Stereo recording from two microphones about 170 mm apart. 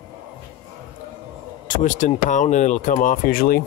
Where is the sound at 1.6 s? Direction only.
50° left (ahead or behind).